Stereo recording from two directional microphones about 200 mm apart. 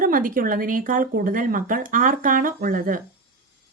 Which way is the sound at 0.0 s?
45° right (ahead or behind).